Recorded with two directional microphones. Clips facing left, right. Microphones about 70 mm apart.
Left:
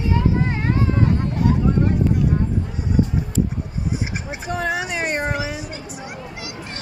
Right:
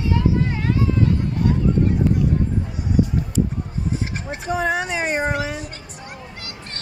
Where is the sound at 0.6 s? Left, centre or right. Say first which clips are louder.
Even; left.